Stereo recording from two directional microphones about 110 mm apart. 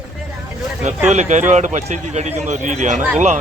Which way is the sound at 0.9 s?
90° right.